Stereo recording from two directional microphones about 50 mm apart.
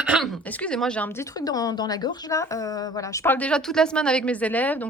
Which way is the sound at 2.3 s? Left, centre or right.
Left.